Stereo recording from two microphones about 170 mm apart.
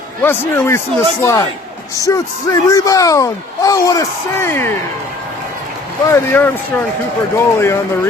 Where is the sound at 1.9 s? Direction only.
20° left (ahead or behind).